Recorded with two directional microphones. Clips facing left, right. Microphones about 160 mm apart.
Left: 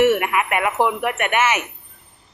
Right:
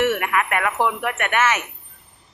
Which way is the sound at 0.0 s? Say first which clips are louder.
Left 4 dB; 10° left (ahead or behind).